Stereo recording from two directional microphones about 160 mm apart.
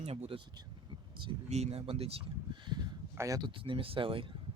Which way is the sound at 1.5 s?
40° right (ahead or behind).